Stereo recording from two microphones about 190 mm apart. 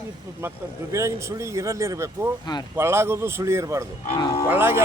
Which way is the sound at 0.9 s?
15° right (ahead or behind).